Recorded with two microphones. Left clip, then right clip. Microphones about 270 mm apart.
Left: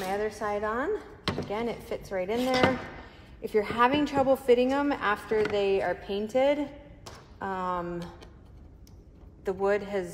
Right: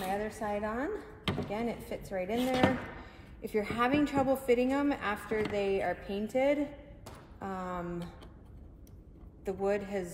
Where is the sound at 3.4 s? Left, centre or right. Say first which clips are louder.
Left 7 dB; left.